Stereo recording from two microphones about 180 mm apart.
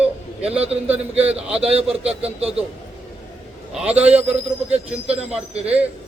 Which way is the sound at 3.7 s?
5° right (ahead or behind).